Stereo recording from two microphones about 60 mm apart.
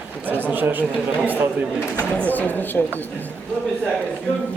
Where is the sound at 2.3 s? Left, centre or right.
Left.